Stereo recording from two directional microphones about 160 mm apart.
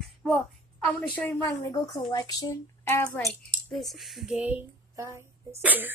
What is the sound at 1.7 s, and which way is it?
Speech, 25° left (ahead or behind).